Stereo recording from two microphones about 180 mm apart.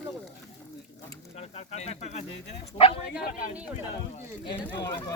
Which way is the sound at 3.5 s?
5° right (ahead or behind).